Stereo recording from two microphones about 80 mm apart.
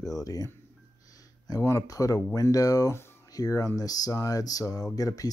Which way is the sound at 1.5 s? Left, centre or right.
Left.